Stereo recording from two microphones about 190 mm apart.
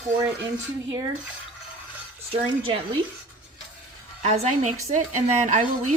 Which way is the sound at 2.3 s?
30° right (ahead or behind).